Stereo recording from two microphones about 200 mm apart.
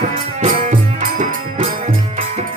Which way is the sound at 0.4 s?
40° right (ahead or behind).